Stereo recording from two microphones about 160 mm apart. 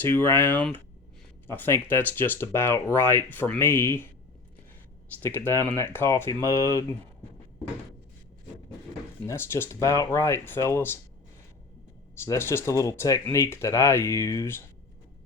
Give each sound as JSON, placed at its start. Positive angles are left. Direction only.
{"t": 0.0, "sound": "speech", "side_deg": 15}
{"t": 5.2, "sound": "speech", "side_deg": 15}
{"t": 9.2, "sound": "speech", "side_deg": 15}
{"t": 12.2, "sound": "speech", "side_deg": 15}